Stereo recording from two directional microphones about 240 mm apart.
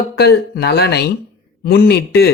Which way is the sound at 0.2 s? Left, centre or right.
Left.